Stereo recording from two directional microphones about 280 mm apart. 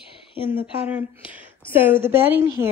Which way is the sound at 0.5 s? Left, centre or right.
Centre.